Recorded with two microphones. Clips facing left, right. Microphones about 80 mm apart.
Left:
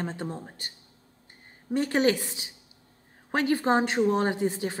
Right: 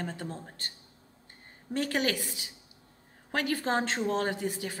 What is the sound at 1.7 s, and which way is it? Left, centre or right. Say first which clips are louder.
A woman's voice: left 6 dB; left.